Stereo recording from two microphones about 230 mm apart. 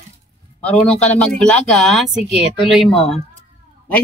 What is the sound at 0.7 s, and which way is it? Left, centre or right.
Speech, centre.